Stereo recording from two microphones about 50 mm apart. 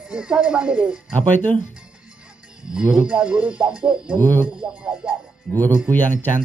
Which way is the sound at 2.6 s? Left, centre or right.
Centre.